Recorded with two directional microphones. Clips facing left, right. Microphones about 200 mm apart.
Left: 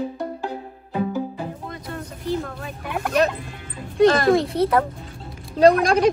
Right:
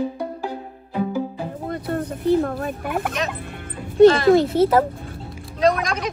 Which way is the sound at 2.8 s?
Centre (ahead or behind).